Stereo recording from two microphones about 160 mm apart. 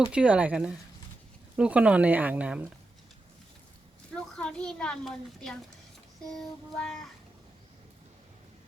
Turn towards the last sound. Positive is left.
turn(degrees=5)  # may be behind; listen again after turning